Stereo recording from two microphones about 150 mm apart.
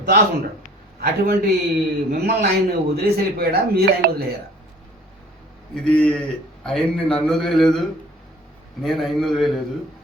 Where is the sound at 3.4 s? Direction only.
90° right.